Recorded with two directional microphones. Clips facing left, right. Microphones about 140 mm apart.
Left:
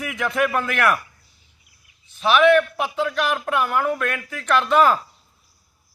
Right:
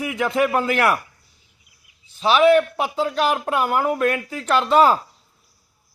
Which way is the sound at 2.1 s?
30° right (ahead or behind).